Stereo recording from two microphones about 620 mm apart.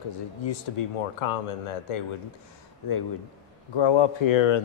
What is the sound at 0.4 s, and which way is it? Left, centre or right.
Speech, left.